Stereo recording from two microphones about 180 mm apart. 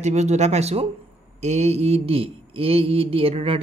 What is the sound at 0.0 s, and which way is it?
A man's voice, 40° right (ahead or behind).